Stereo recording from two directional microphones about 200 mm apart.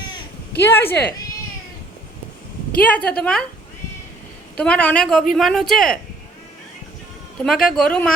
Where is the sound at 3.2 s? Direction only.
5° left (ahead or behind).